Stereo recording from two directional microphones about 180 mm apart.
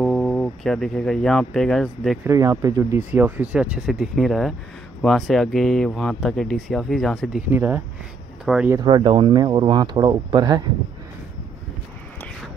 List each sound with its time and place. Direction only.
0.0 s speech: centre (ahead or behind)
2.2 s speech: 15° right (ahead or behind)
8.6 s speech: 25° right (ahead or behind)